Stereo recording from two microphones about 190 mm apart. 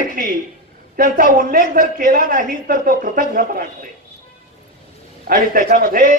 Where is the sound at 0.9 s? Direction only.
45° right (ahead or behind).